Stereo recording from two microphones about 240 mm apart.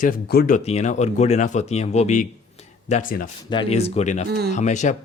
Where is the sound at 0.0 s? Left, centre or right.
Left.